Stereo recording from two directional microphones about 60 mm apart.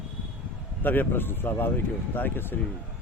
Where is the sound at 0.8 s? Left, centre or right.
Left.